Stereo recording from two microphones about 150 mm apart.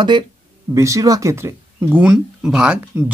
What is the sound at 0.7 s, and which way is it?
Speech, 20° right (ahead or behind).